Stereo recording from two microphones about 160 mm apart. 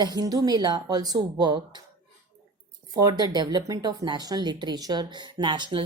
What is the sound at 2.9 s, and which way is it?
Speech, 25° right (ahead or behind).